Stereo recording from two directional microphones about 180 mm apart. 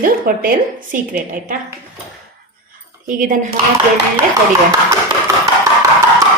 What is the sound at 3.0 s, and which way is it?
Speech, 50° right (ahead or behind).